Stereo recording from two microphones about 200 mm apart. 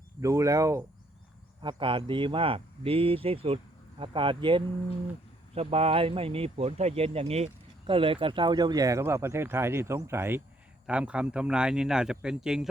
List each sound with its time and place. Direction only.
0.2 s speech: 15° right (ahead or behind)